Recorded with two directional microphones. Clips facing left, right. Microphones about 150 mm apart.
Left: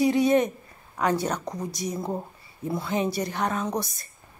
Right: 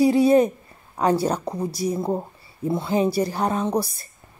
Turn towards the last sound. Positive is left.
turn(degrees=-30)  # may be behind; listen again after turning